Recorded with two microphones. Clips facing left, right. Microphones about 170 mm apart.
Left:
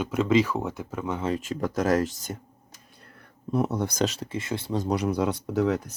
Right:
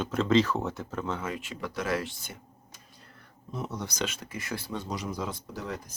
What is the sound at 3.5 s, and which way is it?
Speech, 60° left (ahead or behind).